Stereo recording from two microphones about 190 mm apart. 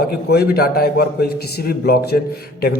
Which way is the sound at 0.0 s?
55° left (ahead or behind).